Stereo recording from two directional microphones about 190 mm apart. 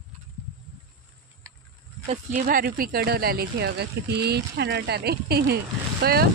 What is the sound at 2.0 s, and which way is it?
Speech, 40° right (ahead or behind).